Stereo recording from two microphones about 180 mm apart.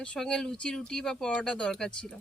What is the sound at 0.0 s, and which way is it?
Speech, 5° left (ahead or behind).